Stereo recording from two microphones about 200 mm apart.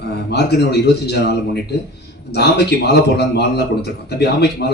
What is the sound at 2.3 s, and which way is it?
Speech, 55° left (ahead or behind).